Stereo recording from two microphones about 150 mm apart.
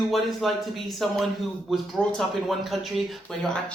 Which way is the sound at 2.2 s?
Centre (ahead or behind).